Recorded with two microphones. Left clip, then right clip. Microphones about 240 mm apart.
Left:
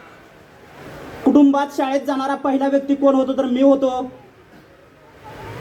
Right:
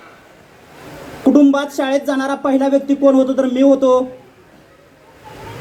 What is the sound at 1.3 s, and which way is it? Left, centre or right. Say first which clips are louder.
Speech: right 2 dB; right.